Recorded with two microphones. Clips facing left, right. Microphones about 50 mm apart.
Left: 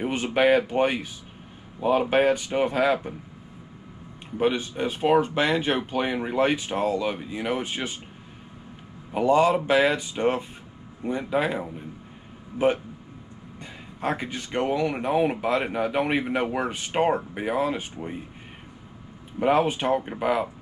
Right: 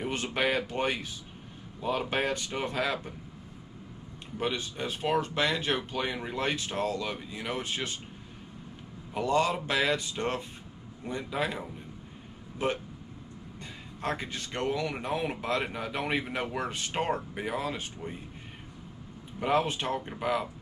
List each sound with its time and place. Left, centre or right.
0.0 s speech: centre
4.4 s speech: centre
9.1 s a man's voice: centre
19.4 s speech: centre